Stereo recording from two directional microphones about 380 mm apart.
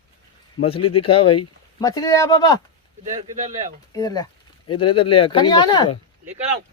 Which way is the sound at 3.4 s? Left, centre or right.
Centre.